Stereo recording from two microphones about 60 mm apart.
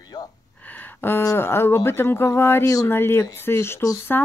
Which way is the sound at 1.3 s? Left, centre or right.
Left.